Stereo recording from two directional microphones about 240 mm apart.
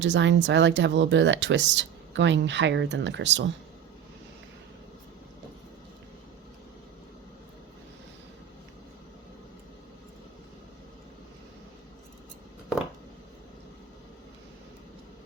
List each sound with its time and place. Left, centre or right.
0.0 s speech: right